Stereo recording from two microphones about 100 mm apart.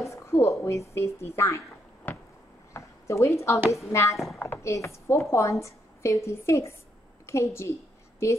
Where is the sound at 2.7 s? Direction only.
30° left (ahead or behind).